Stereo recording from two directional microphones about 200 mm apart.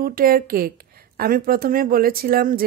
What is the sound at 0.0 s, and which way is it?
A woman's voice, 45° right (ahead or behind).